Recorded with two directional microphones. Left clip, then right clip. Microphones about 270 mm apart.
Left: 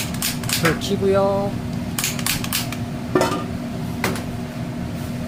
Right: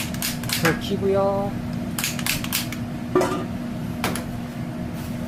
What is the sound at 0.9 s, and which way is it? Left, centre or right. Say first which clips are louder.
Speech: left 5 dB; left.